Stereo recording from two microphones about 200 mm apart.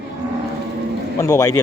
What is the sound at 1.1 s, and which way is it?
Speech, 15° left (ahead or behind).